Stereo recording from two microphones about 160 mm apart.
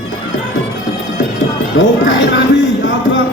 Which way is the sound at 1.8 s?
90° left.